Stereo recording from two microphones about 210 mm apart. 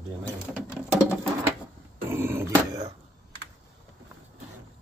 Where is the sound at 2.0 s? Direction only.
10° right (ahead or behind).